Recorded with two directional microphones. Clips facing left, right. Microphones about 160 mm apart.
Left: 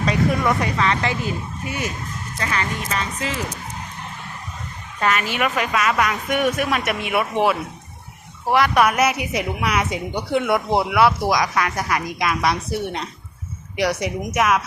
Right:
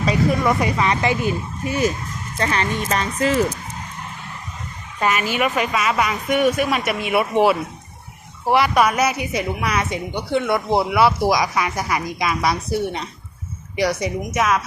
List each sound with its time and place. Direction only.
0.0 s a woman's voice: 5° right (ahead or behind)
0.8 s speech: 15° right (ahead or behind)
2.4 s speech: 35° right (ahead or behind)
3.2 s speech: 45° right (ahead or behind)
4.9 s a woman's voice: 10° right (ahead or behind)
8.5 s a woman's voice: 5° right (ahead or behind); by 10.6 s 10° left (ahead or behind)
10.7 s a woman's voice: centre (ahead or behind)